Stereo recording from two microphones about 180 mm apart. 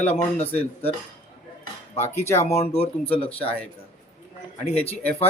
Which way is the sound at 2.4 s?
35° left (ahead or behind).